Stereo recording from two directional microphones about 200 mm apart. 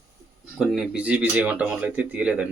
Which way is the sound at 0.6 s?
Centre (ahead or behind).